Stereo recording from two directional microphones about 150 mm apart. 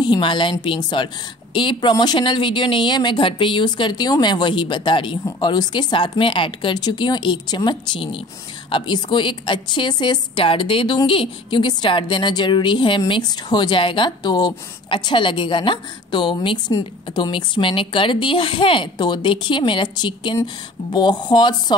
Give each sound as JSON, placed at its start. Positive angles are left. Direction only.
{"t": 0.0, "sound": "a woman's voice", "side_deg": 30}